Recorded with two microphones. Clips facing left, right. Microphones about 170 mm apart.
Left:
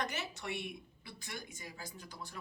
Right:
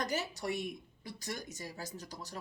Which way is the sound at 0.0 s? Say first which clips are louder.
Right 4 dB; 35° right (ahead or behind).